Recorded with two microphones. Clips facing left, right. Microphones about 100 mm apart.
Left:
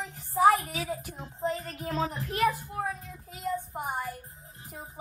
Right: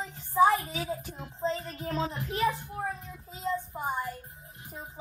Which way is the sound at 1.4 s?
25° right (ahead or behind).